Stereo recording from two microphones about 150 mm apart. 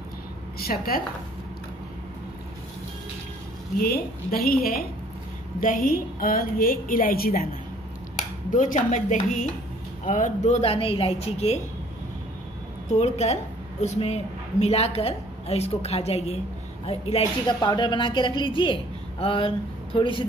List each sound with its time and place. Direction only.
0.6 s a woman's voice: 80° left
3.8 s a woman's voice: 80° left
5.6 s a woman's voice: 65° left (ahead or behind); by 7.4 s 80° left
8.5 s speech: 60° left (ahead or behind); by 11.6 s 45° left (ahead or behind)
13.0 s a woman's voice: 45° left (ahead or behind)
17.6 s a woman's voice: 30° left (ahead or behind)